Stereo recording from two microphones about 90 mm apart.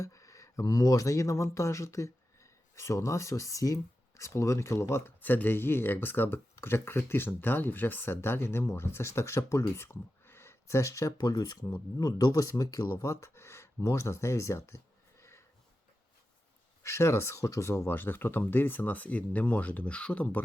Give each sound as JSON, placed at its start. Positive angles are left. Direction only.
{"t": 0.0, "sound": "speech", "side_deg": 40}
{"t": 11.2, "sound": "speech", "side_deg": 50}
{"t": 15.2, "sound": "sniff", "side_deg": 30}
{"t": 16.8, "sound": "speech", "side_deg": 30}